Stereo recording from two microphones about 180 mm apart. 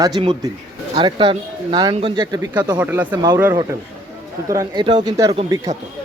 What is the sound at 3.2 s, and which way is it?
Speech, 20° right (ahead or behind).